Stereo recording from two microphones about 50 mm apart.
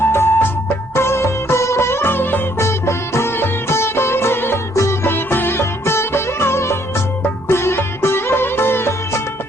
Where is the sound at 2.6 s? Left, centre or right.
Left.